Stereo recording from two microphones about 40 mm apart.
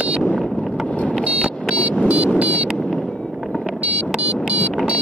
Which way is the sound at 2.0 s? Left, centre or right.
Right.